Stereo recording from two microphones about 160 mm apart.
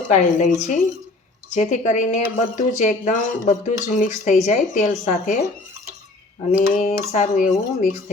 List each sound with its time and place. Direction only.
0.1 s speech: 45° left (ahead or behind)
6.5 s speech: 50° left (ahead or behind)